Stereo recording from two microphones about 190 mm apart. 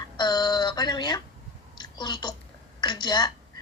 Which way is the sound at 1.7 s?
25° left (ahead or behind).